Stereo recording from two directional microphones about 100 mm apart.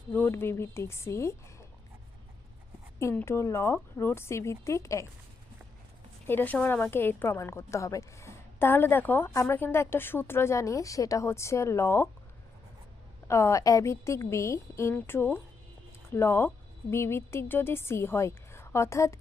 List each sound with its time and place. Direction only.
0.1 s a woman's voice: 20° left (ahead or behind)
3.2 s a woman's voice: 25° left (ahead or behind)
6.2 s a woman's voice: 20° left (ahead or behind)
9.3 s a woman's voice: 35° left (ahead or behind)
13.2 s a woman's voice: 30° left (ahead or behind)